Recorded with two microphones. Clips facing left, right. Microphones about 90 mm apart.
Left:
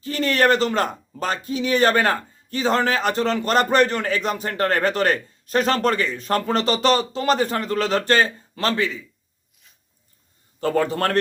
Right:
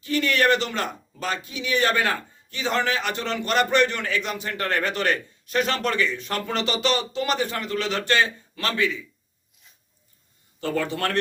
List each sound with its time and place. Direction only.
0.0 s speech: 35° left (ahead or behind)
10.6 s speech: 40° left (ahead or behind)